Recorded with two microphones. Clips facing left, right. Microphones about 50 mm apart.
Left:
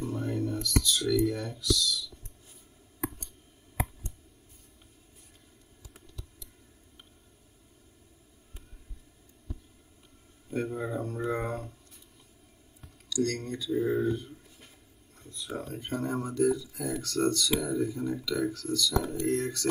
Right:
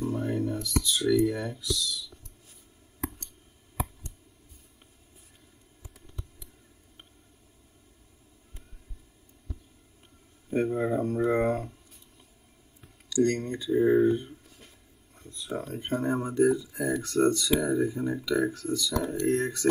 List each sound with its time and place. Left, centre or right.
0.0 s speech: centre
10.5 s speech: right
13.1 s speech: right